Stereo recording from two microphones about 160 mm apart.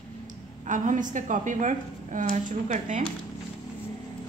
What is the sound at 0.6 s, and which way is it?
A woman's voice, 55° right (ahead or behind).